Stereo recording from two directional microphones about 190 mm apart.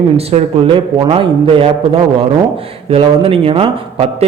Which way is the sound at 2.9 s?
30° right (ahead or behind).